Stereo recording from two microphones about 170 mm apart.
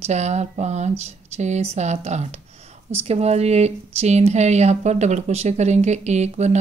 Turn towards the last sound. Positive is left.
turn(degrees=-40)  # may be behind; listen again after turning